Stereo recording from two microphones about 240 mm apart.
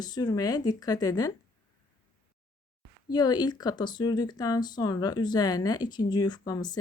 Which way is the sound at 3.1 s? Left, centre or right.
Centre.